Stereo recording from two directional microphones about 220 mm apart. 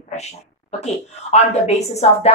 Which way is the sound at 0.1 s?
30° left (ahead or behind).